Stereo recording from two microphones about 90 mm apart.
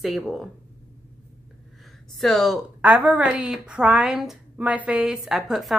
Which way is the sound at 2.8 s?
15° right (ahead or behind).